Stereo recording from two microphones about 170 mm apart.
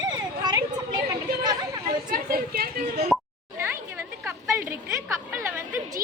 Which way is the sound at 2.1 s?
60° right (ahead or behind).